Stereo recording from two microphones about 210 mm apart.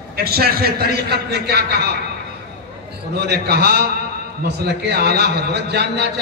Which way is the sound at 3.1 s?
50° right (ahead or behind).